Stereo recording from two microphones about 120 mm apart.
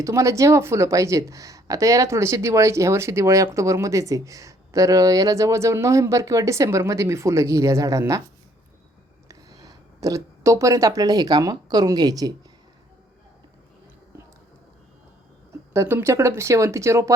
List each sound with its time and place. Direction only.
0.0 s speech: 25° right (ahead or behind)
9.3 s speech: 30° right (ahead or behind)
15.7 s speech: 25° right (ahead or behind)